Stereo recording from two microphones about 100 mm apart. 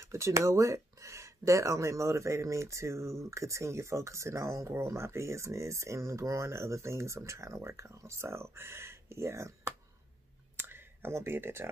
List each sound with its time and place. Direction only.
0.0 s speech: 30° right (ahead or behind)
10.5 s clicking: 20° right (ahead or behind)